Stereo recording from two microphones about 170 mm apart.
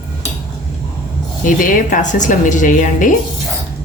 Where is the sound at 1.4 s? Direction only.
50° left (ahead or behind).